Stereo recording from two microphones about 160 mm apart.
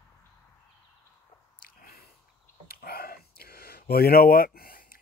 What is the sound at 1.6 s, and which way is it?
Squish, 65° left (ahead or behind).